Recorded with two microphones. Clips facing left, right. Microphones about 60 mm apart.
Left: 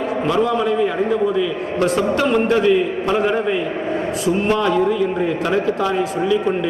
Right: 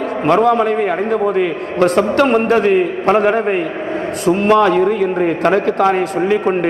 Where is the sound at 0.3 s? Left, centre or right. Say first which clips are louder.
Right 6 dB; right.